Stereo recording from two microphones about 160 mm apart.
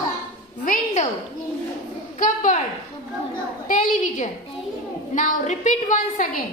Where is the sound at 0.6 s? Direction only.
50° left (ahead or behind).